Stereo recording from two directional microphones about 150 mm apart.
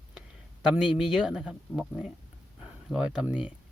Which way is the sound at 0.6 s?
5° right (ahead or behind).